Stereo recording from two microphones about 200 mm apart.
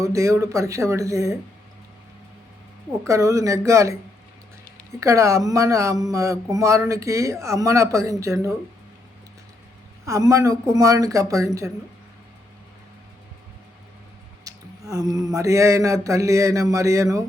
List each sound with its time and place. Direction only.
0.0 s speech: 15° right (ahead or behind)
3.1 s speech: 15° right (ahead or behind)
10.1 s speech: 15° right (ahead or behind)
14.4 s speech: 15° right (ahead or behind)